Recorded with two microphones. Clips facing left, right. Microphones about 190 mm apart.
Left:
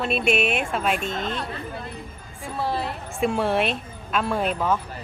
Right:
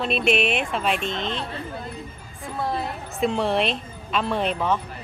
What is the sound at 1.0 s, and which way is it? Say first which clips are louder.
Speech: even; 45° left (ahead or behind).